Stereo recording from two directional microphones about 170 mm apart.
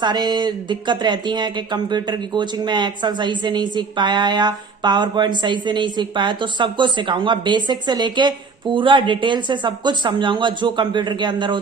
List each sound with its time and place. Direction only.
0.0 s speech: 25° right (ahead or behind)